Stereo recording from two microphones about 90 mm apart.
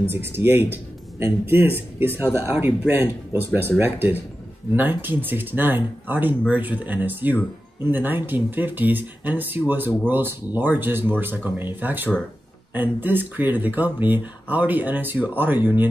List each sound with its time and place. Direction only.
0.0 s speech: 25° right (ahead or behind)